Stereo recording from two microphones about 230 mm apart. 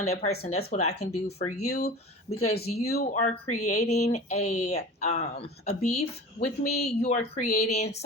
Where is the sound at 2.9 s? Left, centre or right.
Left.